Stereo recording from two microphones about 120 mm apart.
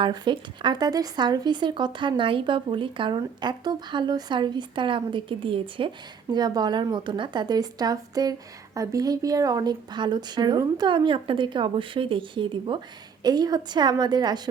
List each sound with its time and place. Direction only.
0.0 s speech: 40° right (ahead or behind)
6.3 s speech: 35° right (ahead or behind)